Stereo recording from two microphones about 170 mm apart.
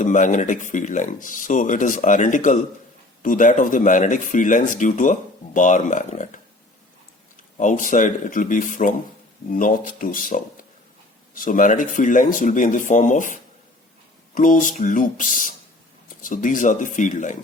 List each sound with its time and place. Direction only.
0.0 s speech: 50° left (ahead or behind)
7.6 s speech: 50° left (ahead or behind)